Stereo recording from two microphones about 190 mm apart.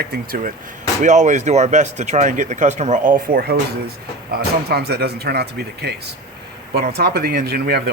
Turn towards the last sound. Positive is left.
turn(degrees=-55)  # may be behind; listen again after turning